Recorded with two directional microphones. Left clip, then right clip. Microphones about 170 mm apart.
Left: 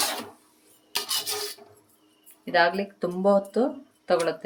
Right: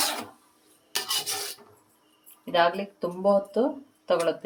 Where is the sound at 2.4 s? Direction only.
20° left (ahead or behind).